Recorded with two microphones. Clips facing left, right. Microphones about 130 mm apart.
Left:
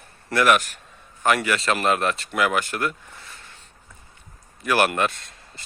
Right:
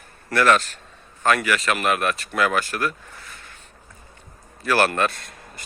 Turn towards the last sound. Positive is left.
turn(degrees=25)  # may be behind; listen again after turning